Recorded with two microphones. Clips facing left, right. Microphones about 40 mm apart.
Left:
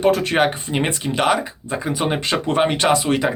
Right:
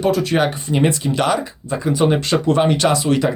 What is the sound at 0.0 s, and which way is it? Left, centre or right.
Speech, left.